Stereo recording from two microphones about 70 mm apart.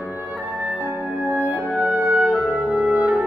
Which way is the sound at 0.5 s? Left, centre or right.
Right.